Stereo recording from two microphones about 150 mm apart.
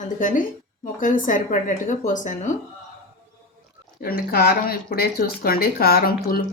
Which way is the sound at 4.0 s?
85° left.